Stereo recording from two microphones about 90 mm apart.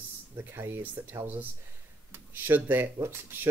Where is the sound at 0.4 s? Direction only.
25° right (ahead or behind).